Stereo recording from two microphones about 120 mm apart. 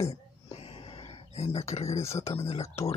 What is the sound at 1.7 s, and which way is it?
Speech, 60° left (ahead or behind).